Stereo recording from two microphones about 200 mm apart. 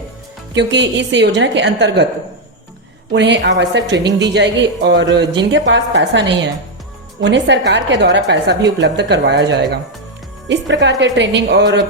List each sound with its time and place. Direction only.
0.5 s a woman's voice: 60° right (ahead or behind)
3.1 s a woman's voice: 60° right (ahead or behind)